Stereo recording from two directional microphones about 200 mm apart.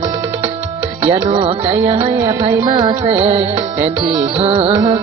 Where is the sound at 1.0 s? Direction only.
30° right (ahead or behind).